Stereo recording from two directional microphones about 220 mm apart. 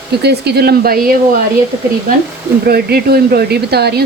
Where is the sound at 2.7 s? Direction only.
45° right (ahead or behind).